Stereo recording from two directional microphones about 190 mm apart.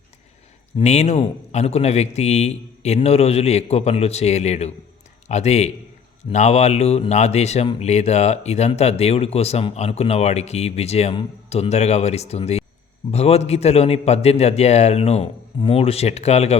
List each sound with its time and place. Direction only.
0.8 s speech: 35° left (ahead or behind)